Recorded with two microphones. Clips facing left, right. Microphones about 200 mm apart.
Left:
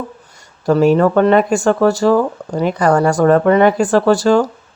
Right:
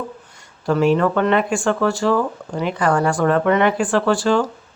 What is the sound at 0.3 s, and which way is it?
Speech, 40° left (ahead or behind).